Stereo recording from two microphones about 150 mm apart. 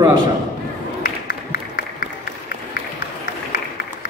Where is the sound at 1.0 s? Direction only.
90° left.